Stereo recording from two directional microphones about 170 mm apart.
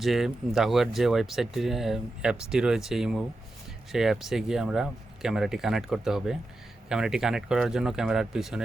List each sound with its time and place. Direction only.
0.0 s speech: centre (ahead or behind)